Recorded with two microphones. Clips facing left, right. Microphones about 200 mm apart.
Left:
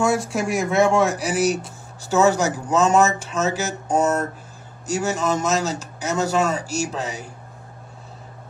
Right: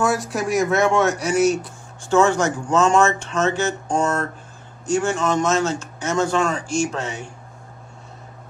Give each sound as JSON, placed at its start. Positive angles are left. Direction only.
{"t": 0.0, "sound": "speech", "side_deg": 0}
{"t": 2.3, "sound": "a man's voice", "side_deg": 35}
{"t": 2.7, "sound": "speech", "side_deg": 5}
{"t": 5.7, "sound": "speech", "side_deg": 35}
{"t": 6.3, "sound": "speech", "side_deg": 5}
{"t": 7.0, "sound": "a man's voice", "side_deg": 35}